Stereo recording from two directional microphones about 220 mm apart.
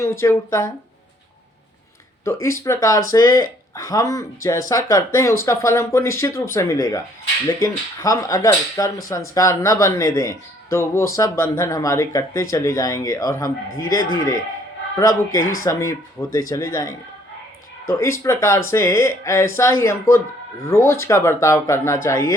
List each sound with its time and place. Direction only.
0.0 s speech: 10° left (ahead or behind)
2.2 s speech: 15° left (ahead or behind)
14.9 s speech: 15° left (ahead or behind)
15.4 s speech: 70° left (ahead or behind)
15.6 s speech: 15° left (ahead or behind)